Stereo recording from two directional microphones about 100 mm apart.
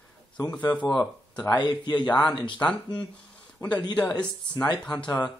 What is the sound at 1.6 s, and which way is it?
Speech, 45° left (ahead or behind).